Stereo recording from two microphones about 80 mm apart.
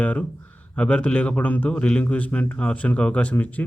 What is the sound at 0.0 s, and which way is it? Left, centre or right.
A man's voice, centre.